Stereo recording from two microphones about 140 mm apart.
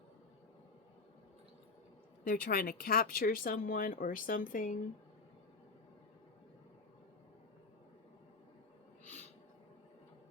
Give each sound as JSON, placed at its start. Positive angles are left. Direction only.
{"t": 2.2, "sound": "speech", "side_deg": 90}